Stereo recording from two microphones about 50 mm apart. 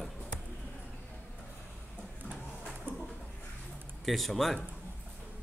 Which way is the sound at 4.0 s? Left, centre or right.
Centre.